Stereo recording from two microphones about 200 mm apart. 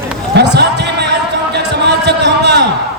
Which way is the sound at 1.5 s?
55° right (ahead or behind).